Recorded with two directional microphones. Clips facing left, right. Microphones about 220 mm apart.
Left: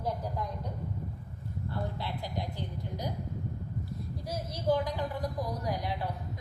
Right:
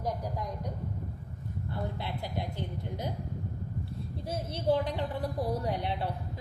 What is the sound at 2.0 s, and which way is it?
Speech, 20° right (ahead or behind).